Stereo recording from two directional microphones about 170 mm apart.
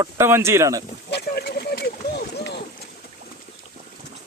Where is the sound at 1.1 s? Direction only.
70° left (ahead or behind).